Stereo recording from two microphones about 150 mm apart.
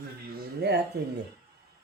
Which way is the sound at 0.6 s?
90° right.